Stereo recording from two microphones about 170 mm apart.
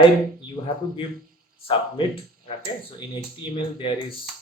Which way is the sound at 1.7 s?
30° left (ahead or behind).